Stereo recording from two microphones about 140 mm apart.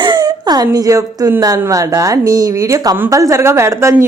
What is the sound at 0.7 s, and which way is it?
Speech, 25° right (ahead or behind).